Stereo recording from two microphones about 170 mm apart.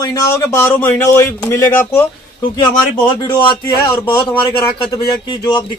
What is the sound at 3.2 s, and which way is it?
Speech, 30° left (ahead or behind).